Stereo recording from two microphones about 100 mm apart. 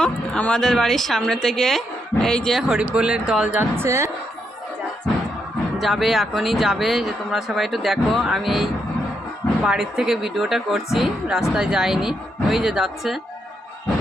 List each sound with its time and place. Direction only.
0.0 s speech: 10° left (ahead or behind); by 3.6 s 10° right (ahead or behind)
3.6 s a woman's voice: 25° right (ahead or behind)
5.8 s speech: centre (ahead or behind)
9.6 s speech: 5° right (ahead or behind)